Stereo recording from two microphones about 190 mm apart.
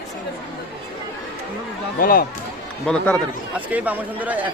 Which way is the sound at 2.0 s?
50° left (ahead or behind).